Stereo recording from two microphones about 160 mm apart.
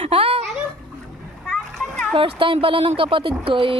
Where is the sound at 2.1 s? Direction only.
35° right (ahead or behind).